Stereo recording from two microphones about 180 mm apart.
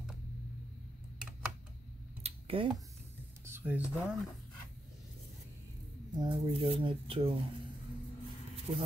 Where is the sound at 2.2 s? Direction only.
30° right (ahead or behind).